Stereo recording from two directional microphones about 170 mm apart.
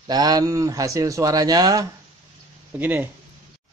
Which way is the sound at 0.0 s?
25° right (ahead or behind).